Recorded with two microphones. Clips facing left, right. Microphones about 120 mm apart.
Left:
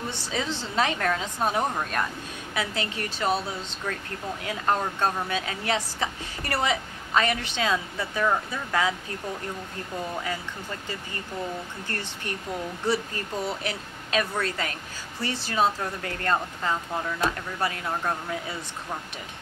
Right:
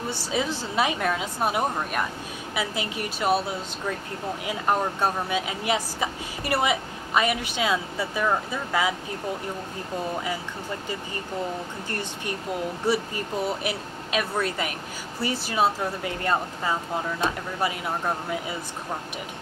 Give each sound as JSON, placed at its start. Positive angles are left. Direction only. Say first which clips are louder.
{"t": 0.1, "sound": "speech", "louder": "right 3 dB", "side_deg": -10}
{"t": 11.9, "sound": "speech", "louder": "right 2 dB", "side_deg": -15}